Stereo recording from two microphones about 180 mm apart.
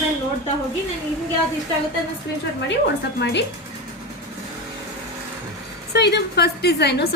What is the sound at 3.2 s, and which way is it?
Speech, 75° left (ahead or behind).